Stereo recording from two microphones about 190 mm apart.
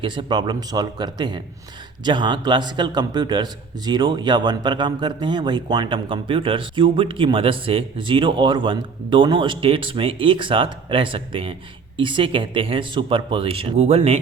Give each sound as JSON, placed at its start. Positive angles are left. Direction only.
{"t": 0.0, "sound": "a man's voice", "side_deg": -25}